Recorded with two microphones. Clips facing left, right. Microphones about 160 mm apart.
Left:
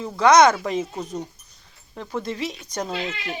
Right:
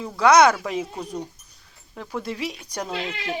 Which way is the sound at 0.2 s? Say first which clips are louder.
Left 1 dB; 10° right (ahead or behind).